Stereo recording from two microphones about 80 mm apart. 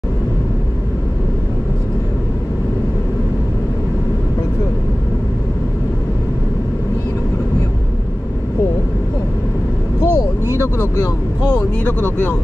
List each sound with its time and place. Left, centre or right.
10.0 s vehicle: right
10.6 s vehicle: left